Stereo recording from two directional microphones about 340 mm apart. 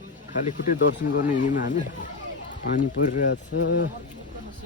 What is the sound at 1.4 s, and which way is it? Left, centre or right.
Speech, left.